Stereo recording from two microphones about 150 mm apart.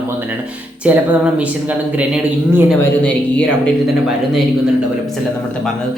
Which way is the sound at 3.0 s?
10° left (ahead or behind).